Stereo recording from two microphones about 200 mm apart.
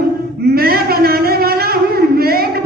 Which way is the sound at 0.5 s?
50° right (ahead or behind).